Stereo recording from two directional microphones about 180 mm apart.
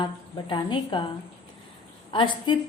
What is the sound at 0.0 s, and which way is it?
A woman's voice, 25° left (ahead or behind).